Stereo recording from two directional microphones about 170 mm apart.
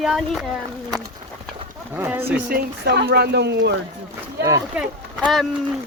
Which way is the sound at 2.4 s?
70° right (ahead or behind).